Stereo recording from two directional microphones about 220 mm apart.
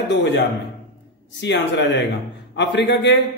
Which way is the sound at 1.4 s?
50° left (ahead or behind).